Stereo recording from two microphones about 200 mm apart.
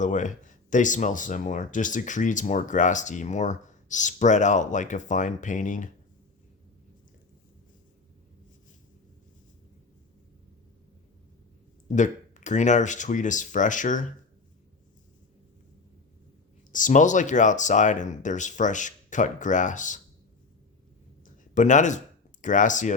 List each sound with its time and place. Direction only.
0.0 s speech: 40° left (ahead or behind)
11.9 s speech: 35° left (ahead or behind)
16.7 s speech: 40° left (ahead or behind)
21.2 s a sound: 40° left (ahead or behind)